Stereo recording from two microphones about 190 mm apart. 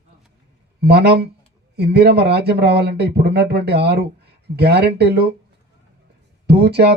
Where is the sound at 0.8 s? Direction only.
60° right (ahead or behind).